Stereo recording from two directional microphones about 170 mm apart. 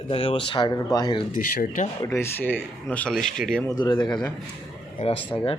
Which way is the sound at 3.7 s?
25° left (ahead or behind).